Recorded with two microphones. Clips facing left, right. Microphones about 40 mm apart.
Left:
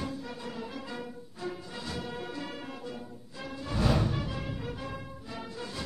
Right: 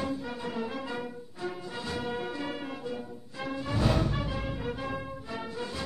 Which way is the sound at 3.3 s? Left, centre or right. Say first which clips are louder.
Right 6 dB; right.